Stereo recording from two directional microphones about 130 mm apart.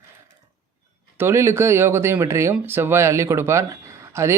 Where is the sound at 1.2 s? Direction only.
20° right (ahead or behind).